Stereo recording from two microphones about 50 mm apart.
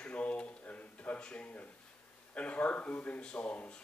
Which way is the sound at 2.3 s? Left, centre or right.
Left.